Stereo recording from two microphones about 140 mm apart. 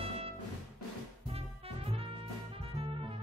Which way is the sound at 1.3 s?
45° right (ahead or behind).